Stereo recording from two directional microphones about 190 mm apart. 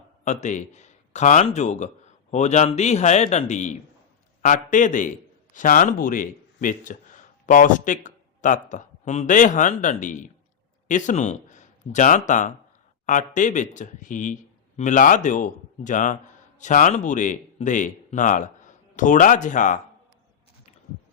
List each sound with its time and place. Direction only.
0.3 s a man's voice: 40° left (ahead or behind)